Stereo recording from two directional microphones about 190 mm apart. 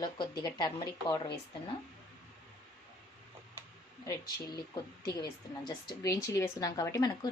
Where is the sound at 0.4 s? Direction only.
20° left (ahead or behind).